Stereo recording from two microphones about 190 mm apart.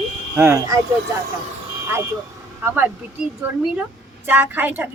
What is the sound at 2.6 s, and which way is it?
A woman's voice, 10° right (ahead or behind).